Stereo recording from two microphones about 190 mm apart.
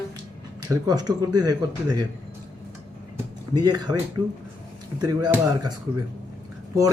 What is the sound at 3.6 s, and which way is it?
Speech, 20° right (ahead or behind).